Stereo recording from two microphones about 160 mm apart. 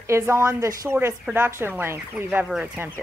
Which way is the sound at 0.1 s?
15° right (ahead or behind).